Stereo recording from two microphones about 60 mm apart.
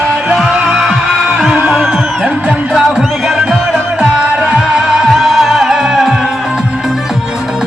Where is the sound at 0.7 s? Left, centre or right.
Centre.